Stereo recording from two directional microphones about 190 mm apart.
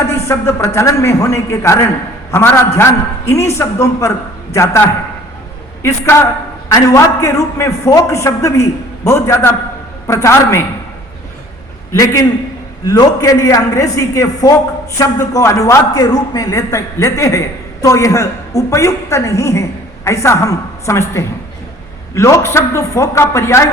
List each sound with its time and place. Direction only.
0.1 s a man's voice: 15° left (ahead or behind)
11.9 s a man's voice: 15° left (ahead or behind)